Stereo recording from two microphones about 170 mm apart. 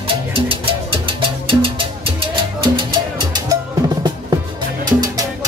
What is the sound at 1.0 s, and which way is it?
Music, 30° right (ahead or behind).